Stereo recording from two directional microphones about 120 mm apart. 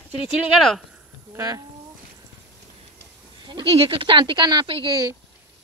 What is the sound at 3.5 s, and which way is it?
Speech, 45° right (ahead or behind).